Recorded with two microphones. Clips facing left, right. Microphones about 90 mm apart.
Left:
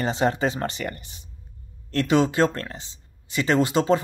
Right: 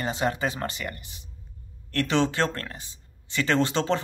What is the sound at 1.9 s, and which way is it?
Speech, 15° left (ahead or behind).